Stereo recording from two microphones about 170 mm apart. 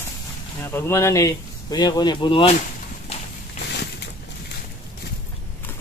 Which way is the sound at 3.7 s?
85° left.